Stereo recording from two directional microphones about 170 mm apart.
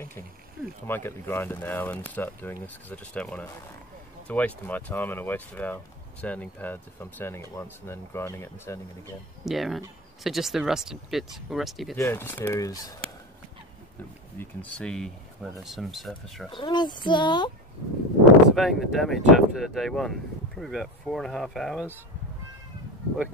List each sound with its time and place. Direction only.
0.8 s speech: 15° left (ahead or behind)
9.4 s speech: centre (ahead or behind)
12.0 s speech: 15° left (ahead or behind)
14.4 s speech: 10° left (ahead or behind)
16.4 s a child's voice: 25° left (ahead or behind)
18.2 s speech: centre (ahead or behind)